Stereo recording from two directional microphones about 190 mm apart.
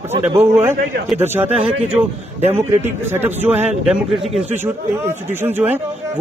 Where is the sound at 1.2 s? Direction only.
10° right (ahead or behind).